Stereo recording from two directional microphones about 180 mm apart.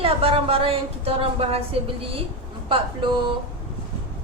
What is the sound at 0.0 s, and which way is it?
A woman's voice, 30° right (ahead or behind).